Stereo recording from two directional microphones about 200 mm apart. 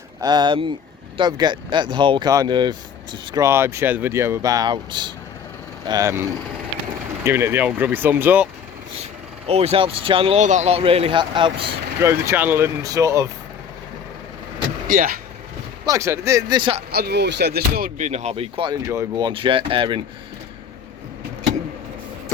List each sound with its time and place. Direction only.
0.2 s speech: 20° right (ahead or behind)
7.3 s speech: 10° right (ahead or behind)
9.5 s speech: 30° right (ahead or behind)
12.0 s speech: 15° right (ahead or behind)
14.8 s speech: 40° right (ahead or behind)
15.9 s speech: 15° right (ahead or behind)
16.9 s speech: 50° right (ahead or behind); by 20.0 s 25° right (ahead or behind)